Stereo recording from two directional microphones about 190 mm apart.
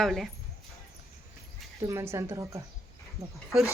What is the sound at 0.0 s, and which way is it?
Speech, centre (ahead or behind).